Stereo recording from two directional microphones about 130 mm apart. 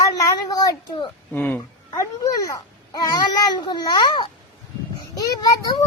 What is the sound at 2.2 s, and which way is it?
A child's voice, 25° left (ahead or behind).